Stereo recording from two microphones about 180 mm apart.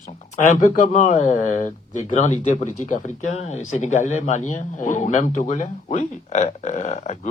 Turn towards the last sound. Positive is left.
turn(degrees=40)  # may be behind; listen again after turning